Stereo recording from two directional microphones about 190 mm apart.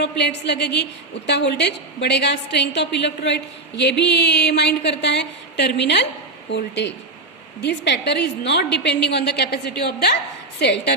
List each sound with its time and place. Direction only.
0.0 s a woman's voice: 65° left (ahead or behind)